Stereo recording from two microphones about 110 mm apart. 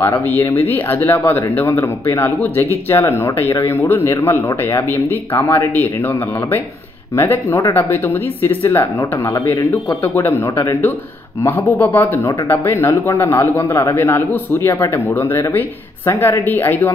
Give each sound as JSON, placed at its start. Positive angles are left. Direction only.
{"t": 0.4, "sound": "speech", "side_deg": 25}
{"t": 7.2, "sound": "speech", "side_deg": 25}